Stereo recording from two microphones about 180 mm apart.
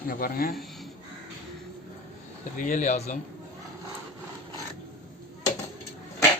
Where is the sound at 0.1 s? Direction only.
55° left (ahead or behind).